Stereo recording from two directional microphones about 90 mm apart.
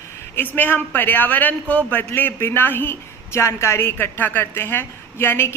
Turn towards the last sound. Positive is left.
turn(degrees=25)  # may be behind; listen again after turning